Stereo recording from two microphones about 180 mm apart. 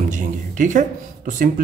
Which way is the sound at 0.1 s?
45° right (ahead or behind).